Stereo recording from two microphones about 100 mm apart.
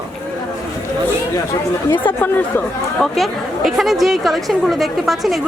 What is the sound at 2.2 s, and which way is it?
Speech, 20° left (ahead or behind).